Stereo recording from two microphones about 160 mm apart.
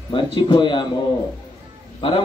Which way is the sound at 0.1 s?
30° left (ahead or behind).